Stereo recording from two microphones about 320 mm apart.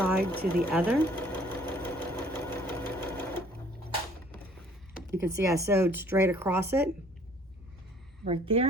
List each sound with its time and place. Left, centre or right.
0.3 s sewing machine: centre
5.1 s speech: centre
8.2 s speech: centre